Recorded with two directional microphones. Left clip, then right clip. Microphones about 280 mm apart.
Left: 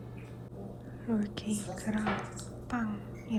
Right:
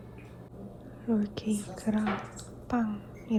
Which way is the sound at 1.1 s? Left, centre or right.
Centre.